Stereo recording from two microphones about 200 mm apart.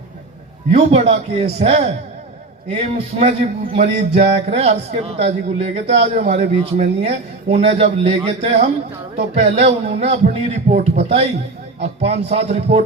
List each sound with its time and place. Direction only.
0.7 s a man's voice: 30° right (ahead or behind)